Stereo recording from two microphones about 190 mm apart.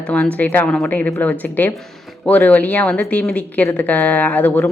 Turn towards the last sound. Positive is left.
turn(degrees=10)  # may be behind; listen again after turning